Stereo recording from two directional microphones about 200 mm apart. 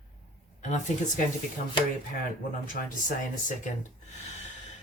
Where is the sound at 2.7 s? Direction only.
40° left (ahead or behind).